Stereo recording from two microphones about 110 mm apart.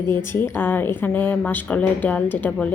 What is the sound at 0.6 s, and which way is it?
A woman's voice, 20° left (ahead or behind).